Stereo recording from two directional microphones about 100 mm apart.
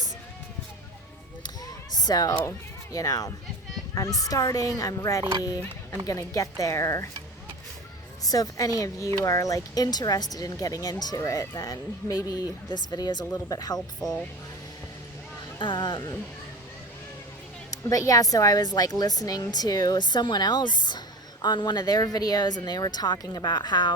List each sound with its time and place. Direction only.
1.6 s basketball bounce: 40° left (ahead or behind)
2.9 s speech: 35° left (ahead or behind)
8.2 s speech: 35° left (ahead or behind)
13.7 s speech: 5° left (ahead or behind)
15.5 s speech: 50° left (ahead or behind)
17.7 s speech: 35° left (ahead or behind)